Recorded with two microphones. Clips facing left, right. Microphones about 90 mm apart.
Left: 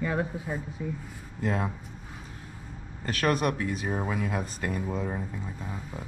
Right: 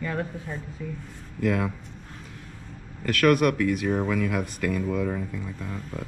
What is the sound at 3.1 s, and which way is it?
Speech, 20° left (ahead or behind).